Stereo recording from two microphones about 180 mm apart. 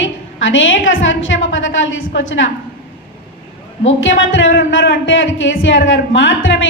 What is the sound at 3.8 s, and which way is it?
Speech, 90° left.